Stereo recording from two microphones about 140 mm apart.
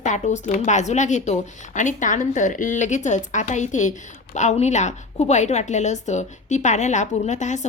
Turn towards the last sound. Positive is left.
turn(degrees=60)  # may be behind; listen again after turning